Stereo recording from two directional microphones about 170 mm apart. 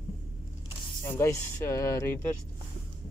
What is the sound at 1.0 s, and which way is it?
Speech, 15° left (ahead or behind).